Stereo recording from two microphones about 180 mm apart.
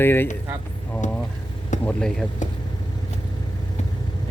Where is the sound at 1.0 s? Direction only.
45° left (ahead or behind).